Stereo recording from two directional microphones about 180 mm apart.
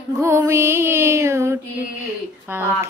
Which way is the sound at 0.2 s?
15° right (ahead or behind).